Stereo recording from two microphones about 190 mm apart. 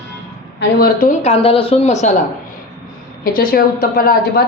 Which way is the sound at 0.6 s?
55° left (ahead or behind).